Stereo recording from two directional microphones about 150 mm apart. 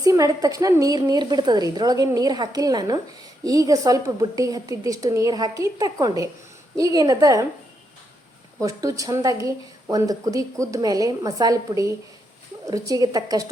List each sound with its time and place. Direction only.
0.0 s speech: 20° right (ahead or behind)
8.6 s speech: 20° right (ahead or behind)